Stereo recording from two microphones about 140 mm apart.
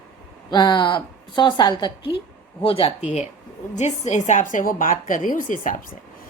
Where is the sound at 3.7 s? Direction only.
55° left (ahead or behind).